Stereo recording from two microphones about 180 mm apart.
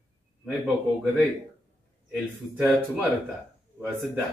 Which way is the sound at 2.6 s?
10° right (ahead or behind).